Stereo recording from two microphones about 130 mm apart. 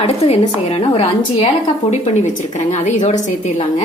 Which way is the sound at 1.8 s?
60° left (ahead or behind).